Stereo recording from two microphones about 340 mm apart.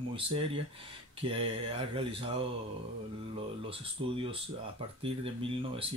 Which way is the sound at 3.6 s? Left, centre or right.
Centre.